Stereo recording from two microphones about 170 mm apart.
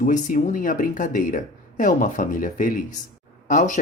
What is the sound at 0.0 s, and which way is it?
Speech, 50° left (ahead or behind).